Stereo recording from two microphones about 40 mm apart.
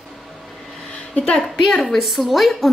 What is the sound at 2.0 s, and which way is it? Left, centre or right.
Speech, centre.